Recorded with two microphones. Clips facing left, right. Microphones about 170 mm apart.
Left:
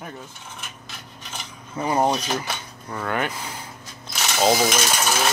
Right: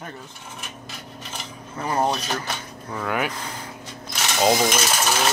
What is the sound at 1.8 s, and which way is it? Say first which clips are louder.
Filing: left 2 dB; 15° left (ahead or behind).